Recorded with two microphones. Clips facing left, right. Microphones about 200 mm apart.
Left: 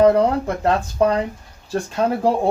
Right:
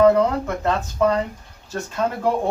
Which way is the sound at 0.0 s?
35° left (ahead or behind).